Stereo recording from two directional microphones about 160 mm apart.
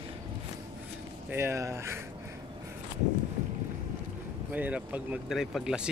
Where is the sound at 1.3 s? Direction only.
15° right (ahead or behind).